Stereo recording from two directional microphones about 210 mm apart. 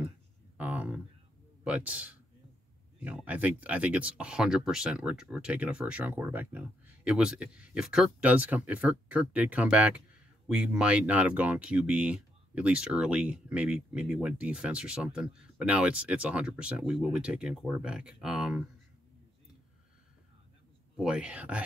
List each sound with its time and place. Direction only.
0.6 s a sound: 5° right (ahead or behind)
1.6 s speech: 5° right (ahead or behind)
20.9 s speech: 5° right (ahead or behind)